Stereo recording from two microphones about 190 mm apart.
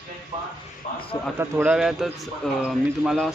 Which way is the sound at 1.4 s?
10° right (ahead or behind).